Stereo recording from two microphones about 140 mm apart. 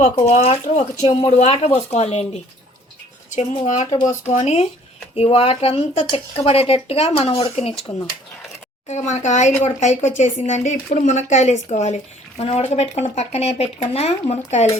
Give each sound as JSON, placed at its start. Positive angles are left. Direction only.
{"t": 0.2, "sound": "speech", "side_deg": 45}
{"t": 3.2, "sound": "speech", "side_deg": 60}